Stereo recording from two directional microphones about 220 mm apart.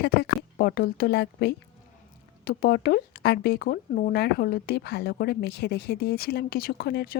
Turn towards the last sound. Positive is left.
turn(degrees=45)  # may be behind; listen again after turning